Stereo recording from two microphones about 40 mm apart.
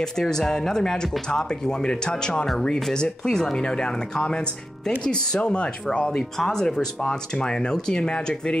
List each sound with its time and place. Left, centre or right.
0.0 s speech: centre
6.0 s speech: centre